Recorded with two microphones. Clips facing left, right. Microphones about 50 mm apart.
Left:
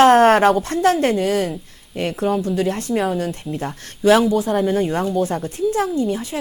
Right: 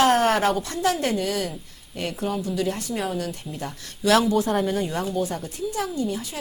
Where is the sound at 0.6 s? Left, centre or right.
Left.